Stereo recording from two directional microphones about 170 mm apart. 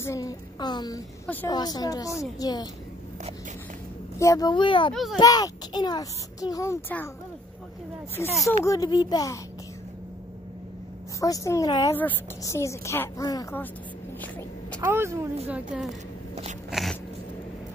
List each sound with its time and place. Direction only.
0.0 s a woman's voice: 20° left (ahead or behind)
1.2 s a woman's voice: 10° left (ahead or behind)
1.5 s a woman's voice: 25° left (ahead or behind)
4.2 s a woman's voice: 20° left (ahead or behind)
4.9 s speech: centre (ahead or behind)
5.2 s a woman's voice: 25° left (ahead or behind)
8.5 s a woman's voice: 20° left (ahead or behind)
11.1 s a woman's voice: 20° left (ahead or behind)
14.8 s speech: 15° right (ahead or behind)
16.7 s a sound: centre (ahead or behind)